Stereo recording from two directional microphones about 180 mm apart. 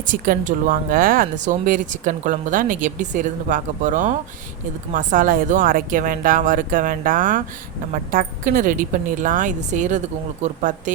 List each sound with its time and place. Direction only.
0.0 s speech: 50° right (ahead or behind)